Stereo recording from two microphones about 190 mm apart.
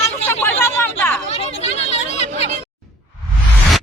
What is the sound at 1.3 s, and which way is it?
Speech, 35° left (ahead or behind).